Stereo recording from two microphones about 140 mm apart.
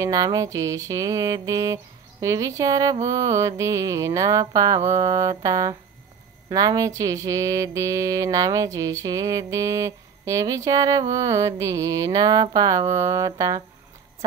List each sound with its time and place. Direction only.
0.0 s mantra: 25° right (ahead or behind)